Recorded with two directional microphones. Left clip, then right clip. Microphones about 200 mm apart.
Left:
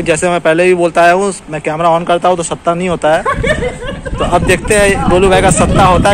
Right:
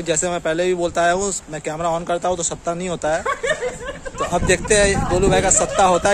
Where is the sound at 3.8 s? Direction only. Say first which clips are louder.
Left 8 dB; 15° left (ahead or behind).